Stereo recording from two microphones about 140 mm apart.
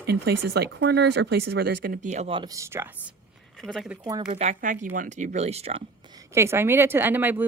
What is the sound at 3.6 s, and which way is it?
Speech, centre (ahead or behind).